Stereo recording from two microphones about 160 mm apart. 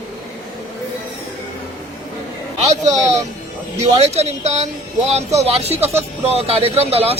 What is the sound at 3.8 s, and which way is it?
Speech, 40° right (ahead or behind).